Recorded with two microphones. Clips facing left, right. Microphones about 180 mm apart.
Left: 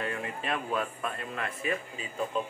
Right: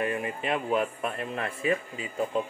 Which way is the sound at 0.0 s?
15° right (ahead or behind).